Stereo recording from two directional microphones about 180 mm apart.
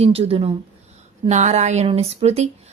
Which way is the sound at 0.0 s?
35° right (ahead or behind).